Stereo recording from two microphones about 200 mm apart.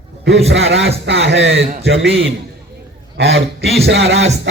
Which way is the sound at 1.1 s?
60° right (ahead or behind).